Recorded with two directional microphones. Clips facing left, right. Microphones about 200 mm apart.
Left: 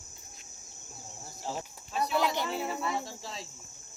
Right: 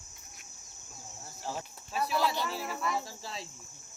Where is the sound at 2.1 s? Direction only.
20° left (ahead or behind).